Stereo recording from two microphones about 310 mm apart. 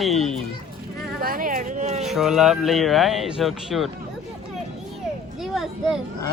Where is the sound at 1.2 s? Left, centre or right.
Right.